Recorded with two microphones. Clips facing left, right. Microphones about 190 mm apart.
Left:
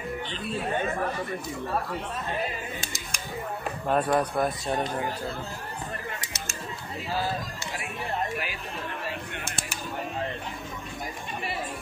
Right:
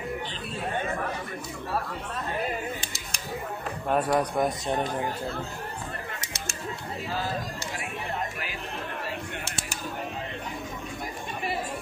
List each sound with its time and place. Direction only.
3.9 s speech: 10° right (ahead or behind)